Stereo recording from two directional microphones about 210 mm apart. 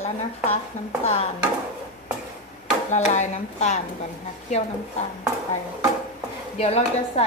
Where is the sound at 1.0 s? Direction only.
30° left (ahead or behind).